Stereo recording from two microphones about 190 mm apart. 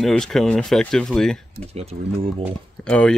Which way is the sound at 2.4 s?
5° left (ahead or behind).